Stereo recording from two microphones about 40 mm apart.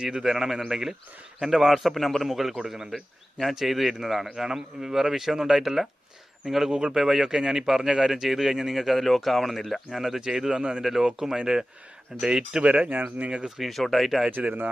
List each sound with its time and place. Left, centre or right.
0.0 s a man's voice: centre
2.9 s a man's voice: centre
6.7 s speech: right
6.9 s speech: centre
10.0 s speech: centre
12.6 s speech: right
13.6 s a man's voice: centre
14.3 s speech: right